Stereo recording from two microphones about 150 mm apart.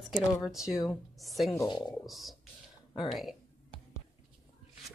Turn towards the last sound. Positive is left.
turn(degrees=0)  # may be behind; listen again after turning